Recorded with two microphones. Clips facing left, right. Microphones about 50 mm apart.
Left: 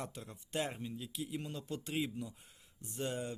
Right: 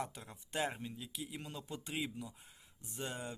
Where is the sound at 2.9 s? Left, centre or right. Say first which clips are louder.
Left 4 dB; centre.